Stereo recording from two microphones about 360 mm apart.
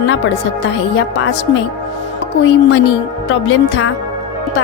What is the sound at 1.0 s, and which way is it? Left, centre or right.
Speech, left.